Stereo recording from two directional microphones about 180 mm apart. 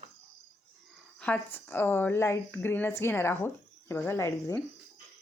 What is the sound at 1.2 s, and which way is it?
A woman's voice, 10° left (ahead or behind).